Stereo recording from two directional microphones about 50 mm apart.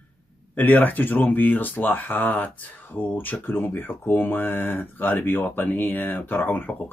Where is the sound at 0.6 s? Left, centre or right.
Left.